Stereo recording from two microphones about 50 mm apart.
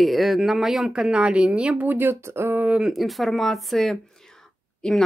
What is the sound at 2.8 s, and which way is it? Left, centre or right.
Speech, centre.